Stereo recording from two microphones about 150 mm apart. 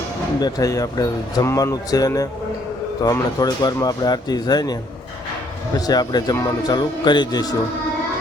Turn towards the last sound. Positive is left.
turn(degrees=25)  # may be behind; listen again after turning